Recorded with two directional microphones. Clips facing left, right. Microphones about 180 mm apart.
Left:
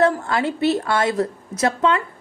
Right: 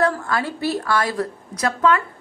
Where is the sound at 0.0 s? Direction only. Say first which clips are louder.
Left 3 dB; 25° left (ahead or behind).